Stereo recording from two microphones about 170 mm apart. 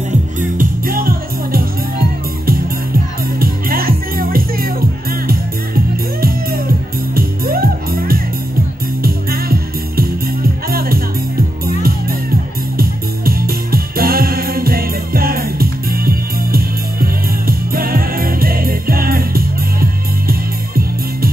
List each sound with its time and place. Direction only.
0.4 s music: 55° right (ahead or behind)
3.3 s music: 60° right (ahead or behind)
7.2 s music: 60° right (ahead or behind)